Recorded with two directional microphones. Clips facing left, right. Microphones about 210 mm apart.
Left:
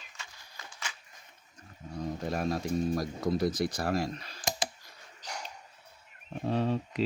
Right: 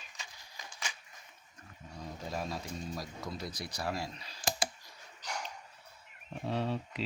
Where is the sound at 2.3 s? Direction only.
60° left (ahead or behind).